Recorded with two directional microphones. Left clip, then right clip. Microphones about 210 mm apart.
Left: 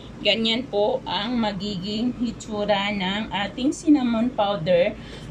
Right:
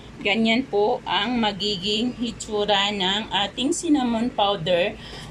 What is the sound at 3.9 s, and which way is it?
Speech, 5° right (ahead or behind).